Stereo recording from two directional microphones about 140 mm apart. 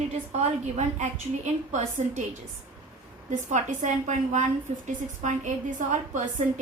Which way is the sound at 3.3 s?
60° right (ahead or behind).